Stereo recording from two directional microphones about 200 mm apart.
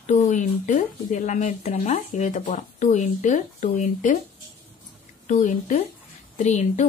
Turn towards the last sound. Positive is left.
turn(degrees=35)  # may be behind; listen again after turning